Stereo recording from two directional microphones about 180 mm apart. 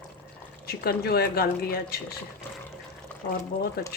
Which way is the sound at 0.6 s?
60° left (ahead or behind).